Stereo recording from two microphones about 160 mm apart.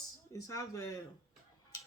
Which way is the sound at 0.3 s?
20° left (ahead or behind).